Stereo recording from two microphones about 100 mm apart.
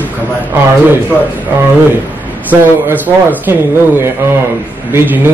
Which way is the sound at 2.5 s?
15° right (ahead or behind).